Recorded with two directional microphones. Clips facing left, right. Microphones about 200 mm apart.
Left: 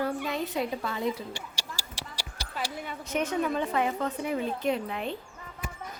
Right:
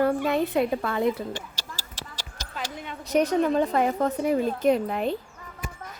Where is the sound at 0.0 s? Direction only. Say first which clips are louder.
Right 7 dB; 55° right (ahead or behind).